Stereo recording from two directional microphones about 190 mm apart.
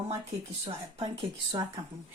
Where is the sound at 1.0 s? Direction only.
25° right (ahead or behind).